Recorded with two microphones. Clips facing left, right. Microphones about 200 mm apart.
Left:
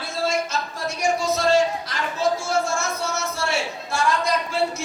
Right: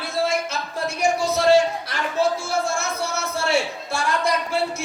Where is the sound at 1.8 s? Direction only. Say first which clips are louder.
Right 1 dB; 60° right (ahead or behind).